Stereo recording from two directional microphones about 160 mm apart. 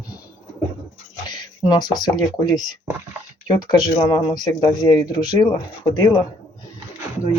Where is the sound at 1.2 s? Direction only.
25° left (ahead or behind).